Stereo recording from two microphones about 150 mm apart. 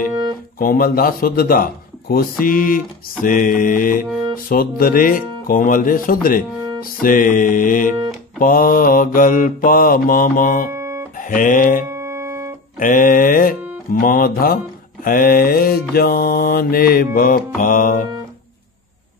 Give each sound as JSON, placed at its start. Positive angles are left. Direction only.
{"t": 0.6, "sound": "speech", "side_deg": 75}
{"t": 10.7, "sound": "music", "side_deg": -20}
{"t": 11.1, "sound": "music", "side_deg": 65}
{"t": 11.9, "sound": "music", "side_deg": -20}
{"t": 12.7, "sound": "speech", "side_deg": 65}
{"t": 15.0, "sound": "mantra", "side_deg": 75}